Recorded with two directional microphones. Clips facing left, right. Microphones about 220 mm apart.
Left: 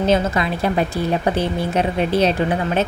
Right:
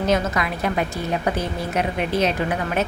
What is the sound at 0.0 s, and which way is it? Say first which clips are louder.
A woman's voice: left 3 dB; 30° left (ahead or behind).